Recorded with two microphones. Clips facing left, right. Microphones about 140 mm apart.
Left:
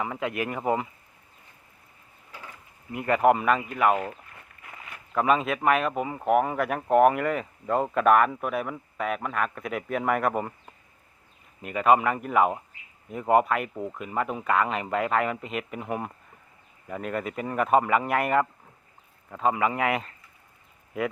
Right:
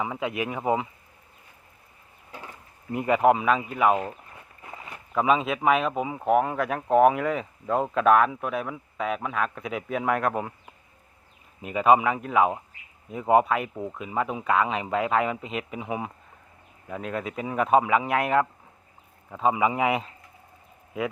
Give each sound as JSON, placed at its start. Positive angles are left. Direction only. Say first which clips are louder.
{"t": 0.0, "sound": "speech", "louder": "right 1 dB", "side_deg": -5}
{"t": 3.2, "sound": "speech", "louder": "even", "side_deg": 0}
{"t": 4.6, "sound": "walk", "louder": "right 4 dB", "side_deg": -30}
{"t": 5.1, "sound": "speech", "louder": "right 1 dB", "side_deg": 0}
{"t": 11.7, "sound": "speech", "louder": "right 1 dB", "side_deg": -5}